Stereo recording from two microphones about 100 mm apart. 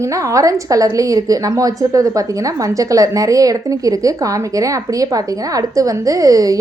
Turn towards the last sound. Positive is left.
turn(degrees=-35)  # may be behind; listen again after turning